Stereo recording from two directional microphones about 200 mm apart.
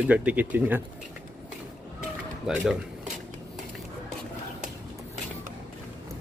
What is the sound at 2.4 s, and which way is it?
Speech, centre (ahead or behind).